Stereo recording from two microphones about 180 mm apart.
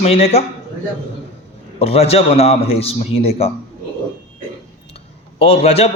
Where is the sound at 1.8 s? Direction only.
35° left (ahead or behind).